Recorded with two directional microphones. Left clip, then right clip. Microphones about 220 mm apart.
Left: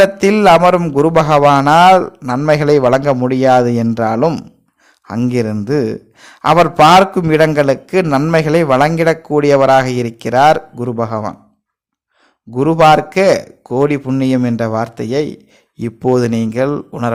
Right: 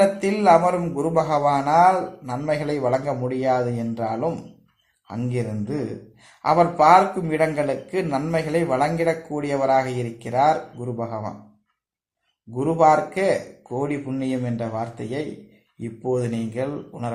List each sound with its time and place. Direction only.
0.2 s a man's voice: 40° left (ahead or behind)
12.5 s a man's voice: 45° left (ahead or behind)